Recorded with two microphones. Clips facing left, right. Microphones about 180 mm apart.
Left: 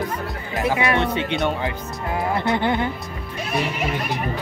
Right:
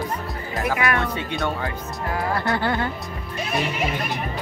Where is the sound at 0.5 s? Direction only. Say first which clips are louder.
Left 2 dB; 20° left (ahead or behind).